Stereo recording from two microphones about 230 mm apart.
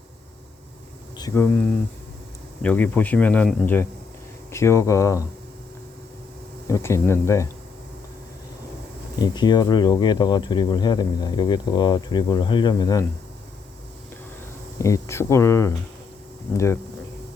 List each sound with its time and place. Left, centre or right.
1.2 s speech: centre
6.7 s speech: centre
9.2 s speech: centre
14.8 s speech: centre